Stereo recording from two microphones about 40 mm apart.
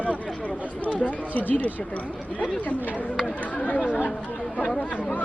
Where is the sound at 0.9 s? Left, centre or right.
Left.